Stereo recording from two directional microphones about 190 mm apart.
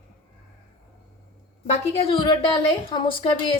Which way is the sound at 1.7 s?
30° left (ahead or behind).